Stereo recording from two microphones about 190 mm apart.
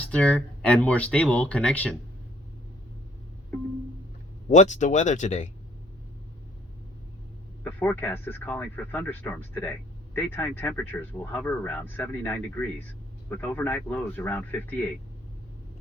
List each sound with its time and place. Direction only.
0.1 s speech: 5° left (ahead or behind)
4.4 s speech: 40° left (ahead or behind)
7.6 s speech: 10° left (ahead or behind)